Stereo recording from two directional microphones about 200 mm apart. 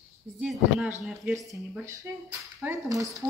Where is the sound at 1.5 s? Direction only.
15° right (ahead or behind).